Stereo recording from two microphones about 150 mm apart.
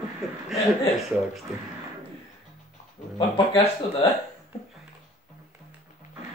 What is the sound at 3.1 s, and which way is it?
Speech, 35° left (ahead or behind).